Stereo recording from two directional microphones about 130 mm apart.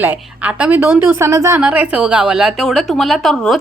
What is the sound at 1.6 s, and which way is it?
Speech, 10° right (ahead or behind).